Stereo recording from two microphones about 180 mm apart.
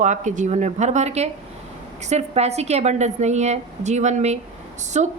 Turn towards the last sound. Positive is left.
turn(degrees=-40)  # may be behind; listen again after turning